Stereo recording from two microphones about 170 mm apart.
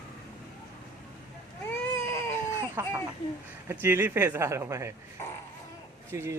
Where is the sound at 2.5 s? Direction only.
15° right (ahead or behind).